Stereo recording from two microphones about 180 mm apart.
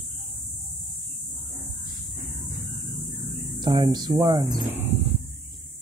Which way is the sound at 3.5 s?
25° right (ahead or behind).